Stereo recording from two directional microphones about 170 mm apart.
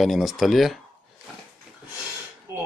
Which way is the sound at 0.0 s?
Centre (ahead or behind).